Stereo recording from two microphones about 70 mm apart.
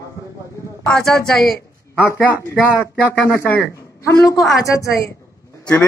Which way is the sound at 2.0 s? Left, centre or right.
Left.